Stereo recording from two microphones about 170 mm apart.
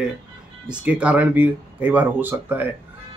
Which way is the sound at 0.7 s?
5° right (ahead or behind).